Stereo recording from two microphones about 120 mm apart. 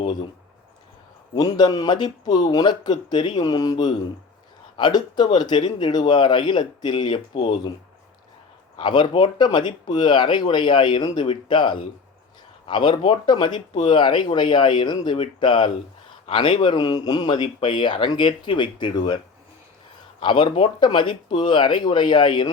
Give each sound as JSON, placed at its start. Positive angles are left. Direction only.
{"t": 1.4, "sound": "speech", "side_deg": 35}
{"t": 8.8, "sound": "speech", "side_deg": 40}